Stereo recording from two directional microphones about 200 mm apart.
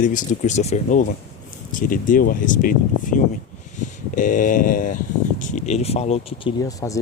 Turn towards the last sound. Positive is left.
turn(degrees=15)  # may be behind; listen again after turning